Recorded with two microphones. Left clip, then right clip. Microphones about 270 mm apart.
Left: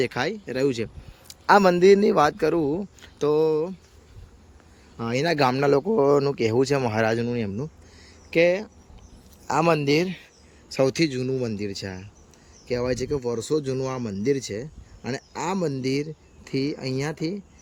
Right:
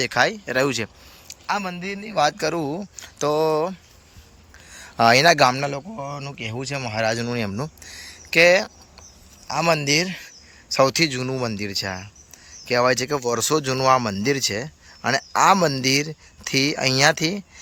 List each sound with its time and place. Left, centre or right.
0.0 s speech: centre
1.3 s a man's voice: left
2.1 s speech: centre
5.1 s a man's voice: centre
7.9 s a sound: centre
9.5 s speech: centre
13.1 s speech: right
13.6 s speech: centre
16.0 s speech: right